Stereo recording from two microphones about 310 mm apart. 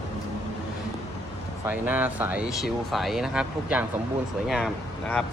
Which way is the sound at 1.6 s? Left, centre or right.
Centre.